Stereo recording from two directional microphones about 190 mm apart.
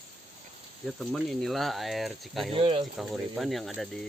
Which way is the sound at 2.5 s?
30° right (ahead or behind).